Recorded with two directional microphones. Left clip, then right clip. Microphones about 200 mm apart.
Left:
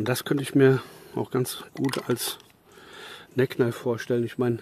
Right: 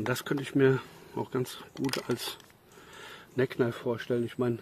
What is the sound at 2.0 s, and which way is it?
Speech, 55° left (ahead or behind).